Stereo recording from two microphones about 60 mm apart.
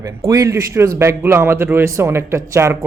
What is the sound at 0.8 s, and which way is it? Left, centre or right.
Speech, right.